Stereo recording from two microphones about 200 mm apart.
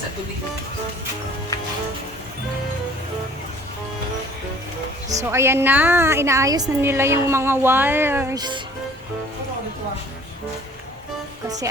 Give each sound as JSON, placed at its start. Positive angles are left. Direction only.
{"t": 5.0, "sound": "a woman's voice", "side_deg": -15}
{"t": 11.4, "sound": "a woman's voice", "side_deg": -20}